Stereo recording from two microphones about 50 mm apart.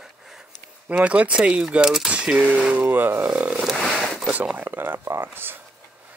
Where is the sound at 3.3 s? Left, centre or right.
Centre.